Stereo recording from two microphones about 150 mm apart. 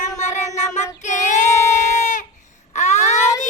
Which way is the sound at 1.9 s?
55° left (ahead or behind).